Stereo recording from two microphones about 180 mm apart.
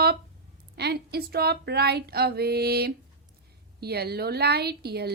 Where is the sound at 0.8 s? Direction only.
65° right (ahead or behind).